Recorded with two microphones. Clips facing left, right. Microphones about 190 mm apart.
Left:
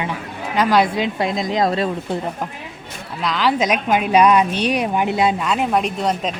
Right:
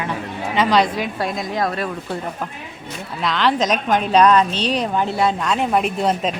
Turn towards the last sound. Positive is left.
turn(degrees=0)  # may be behind; listen again after turning